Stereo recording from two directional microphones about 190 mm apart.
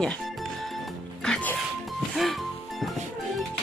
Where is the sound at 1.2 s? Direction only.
5° left (ahead or behind).